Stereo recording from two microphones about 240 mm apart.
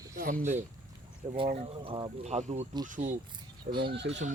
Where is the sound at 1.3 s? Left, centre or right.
Right.